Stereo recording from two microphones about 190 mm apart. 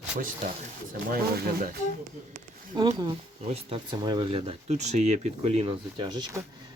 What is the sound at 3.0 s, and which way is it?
Speech, 25° right (ahead or behind).